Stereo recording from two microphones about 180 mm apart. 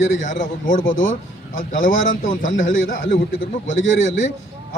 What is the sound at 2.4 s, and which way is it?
A man's voice, 90° left.